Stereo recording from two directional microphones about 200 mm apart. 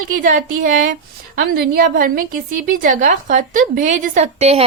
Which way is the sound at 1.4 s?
50° right (ahead or behind).